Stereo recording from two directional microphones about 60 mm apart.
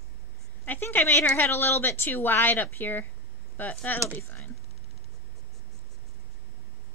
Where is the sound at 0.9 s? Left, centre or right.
Left.